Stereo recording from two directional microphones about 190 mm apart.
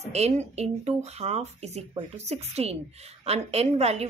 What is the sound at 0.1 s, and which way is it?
Speech, 35° right (ahead or behind).